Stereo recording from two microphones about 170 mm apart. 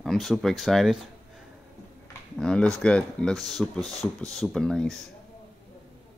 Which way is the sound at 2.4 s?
5° left (ahead or behind).